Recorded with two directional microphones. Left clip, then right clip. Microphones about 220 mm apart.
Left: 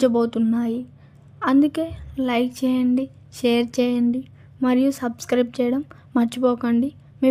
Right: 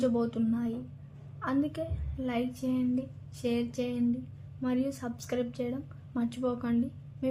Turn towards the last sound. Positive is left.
turn(degrees=50)  # may be behind; listen again after turning